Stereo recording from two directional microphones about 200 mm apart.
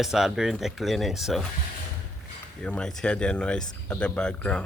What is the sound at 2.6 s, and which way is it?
Speech, 5° left (ahead or behind).